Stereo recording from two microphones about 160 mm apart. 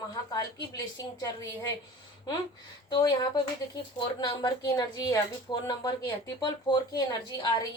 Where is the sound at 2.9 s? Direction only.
25° left (ahead or behind).